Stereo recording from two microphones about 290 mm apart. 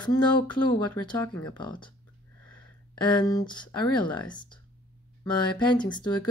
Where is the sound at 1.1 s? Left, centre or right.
Centre.